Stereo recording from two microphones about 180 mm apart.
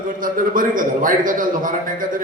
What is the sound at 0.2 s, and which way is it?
A man's voice, 50° right (ahead or behind).